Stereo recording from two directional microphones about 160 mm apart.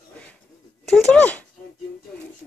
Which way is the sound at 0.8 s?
Centre (ahead or behind).